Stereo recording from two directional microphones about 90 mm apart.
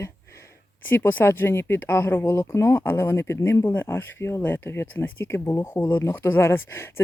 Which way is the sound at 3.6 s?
25° left (ahead or behind).